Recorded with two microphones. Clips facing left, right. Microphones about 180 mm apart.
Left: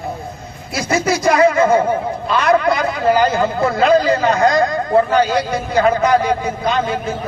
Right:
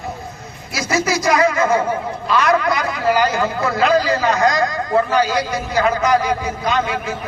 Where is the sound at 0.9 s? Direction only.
55° left (ahead or behind).